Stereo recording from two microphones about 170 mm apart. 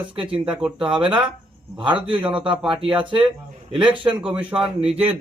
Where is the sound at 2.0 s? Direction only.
30° right (ahead or behind).